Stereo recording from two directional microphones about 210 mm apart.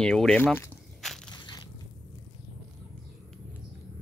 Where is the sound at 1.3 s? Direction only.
20° left (ahead or behind).